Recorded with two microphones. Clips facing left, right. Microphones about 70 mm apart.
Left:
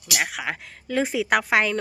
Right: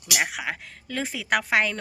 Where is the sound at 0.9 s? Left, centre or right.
Centre.